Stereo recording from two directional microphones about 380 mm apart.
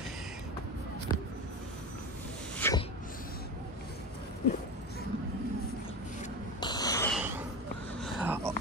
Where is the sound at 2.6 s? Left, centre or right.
Centre.